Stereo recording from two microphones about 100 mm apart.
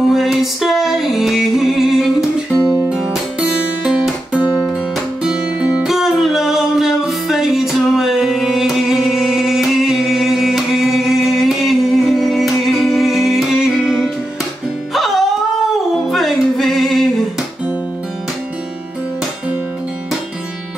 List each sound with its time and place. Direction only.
0.1 s music: centre (ahead or behind)
2.7 s music: 15° right (ahead or behind)
3.0 s guitar: 10° right (ahead or behind)
5.2 s music: 10° right (ahead or behind)